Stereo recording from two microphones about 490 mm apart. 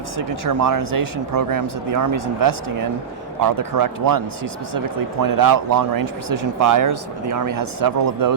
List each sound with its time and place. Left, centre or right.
0.2 s speech: right
5.2 s speech: right